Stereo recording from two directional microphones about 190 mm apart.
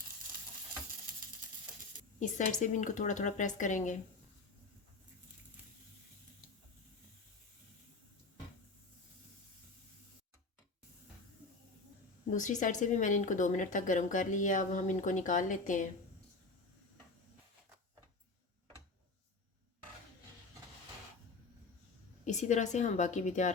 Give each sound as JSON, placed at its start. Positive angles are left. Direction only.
{"t": 2.1, "sound": "a woman's voice", "side_deg": 40}
{"t": 12.3, "sound": "a woman's voice", "side_deg": 40}
{"t": 22.2, "sound": "a woman's voice", "side_deg": 40}